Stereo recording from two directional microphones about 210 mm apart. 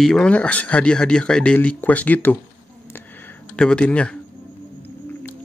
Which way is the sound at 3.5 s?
5° left (ahead or behind).